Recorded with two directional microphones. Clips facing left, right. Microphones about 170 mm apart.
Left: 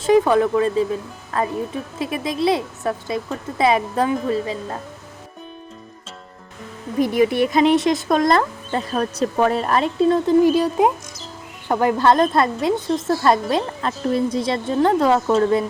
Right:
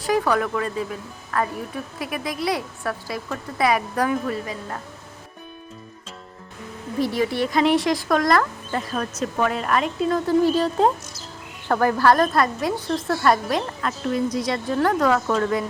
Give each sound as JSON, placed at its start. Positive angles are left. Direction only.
{"t": 0.0, "sound": "a woman's voice", "side_deg": 25}
{"t": 7.0, "sound": "a woman's voice", "side_deg": 20}
{"t": 10.4, "sound": "a woman's voice", "side_deg": 15}